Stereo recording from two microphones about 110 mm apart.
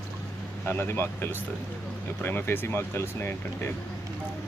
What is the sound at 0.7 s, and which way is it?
Speech, 20° left (ahead or behind).